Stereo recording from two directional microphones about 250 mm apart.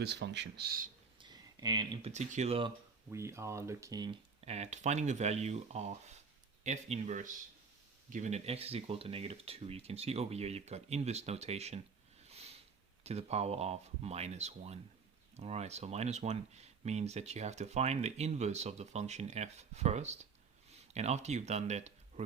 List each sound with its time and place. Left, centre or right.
0.0 s speech: right
1.2 s speech: centre
12.2 s a sound: right
13.1 s speech: right